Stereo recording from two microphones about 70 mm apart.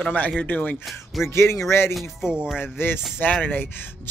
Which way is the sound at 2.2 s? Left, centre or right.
Centre.